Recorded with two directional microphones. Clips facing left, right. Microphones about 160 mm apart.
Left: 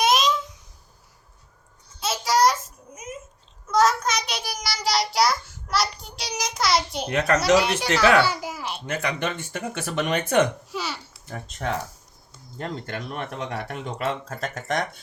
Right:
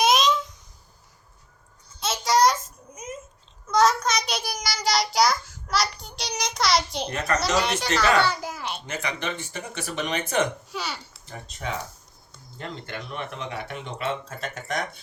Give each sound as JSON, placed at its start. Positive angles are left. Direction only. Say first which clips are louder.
{"t": 0.0, "sound": "a sound", "louder": "even", "side_deg": 0}
{"t": 2.0, "sound": "a sound", "louder": "even", "side_deg": 0}
{"t": 3.7, "sound": "child singing", "louder": "even", "side_deg": 0}
{"t": 7.1, "sound": "speech", "louder": "left 6 dB", "side_deg": 65}
{"t": 7.3, "sound": "speech", "louder": "left 4 dB", "side_deg": 10}
{"t": 8.2, "sound": "a sound", "louder": "left 1 dB", "side_deg": 5}
{"t": 8.9, "sound": "speech", "louder": "left 5 dB", "side_deg": 55}
{"t": 10.7, "sound": "babbling", "louder": "left 2 dB", "side_deg": 0}
{"t": 11.3, "sound": "speech", "louder": "left 4 dB", "side_deg": 50}